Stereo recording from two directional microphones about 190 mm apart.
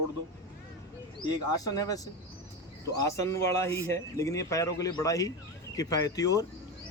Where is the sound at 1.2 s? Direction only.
20° left (ahead or behind).